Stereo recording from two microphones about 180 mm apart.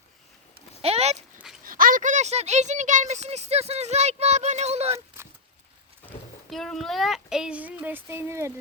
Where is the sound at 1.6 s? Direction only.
50° right (ahead or behind).